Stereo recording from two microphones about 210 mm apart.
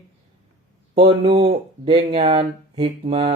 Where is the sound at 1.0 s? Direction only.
25° right (ahead or behind).